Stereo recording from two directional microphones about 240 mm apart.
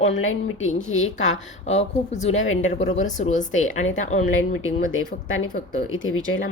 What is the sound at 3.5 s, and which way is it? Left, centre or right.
Speech, left.